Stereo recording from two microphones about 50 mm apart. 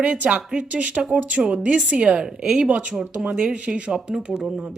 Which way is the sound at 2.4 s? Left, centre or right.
Centre.